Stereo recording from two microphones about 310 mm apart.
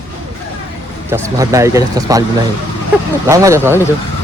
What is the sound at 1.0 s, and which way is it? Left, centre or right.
Speech, centre.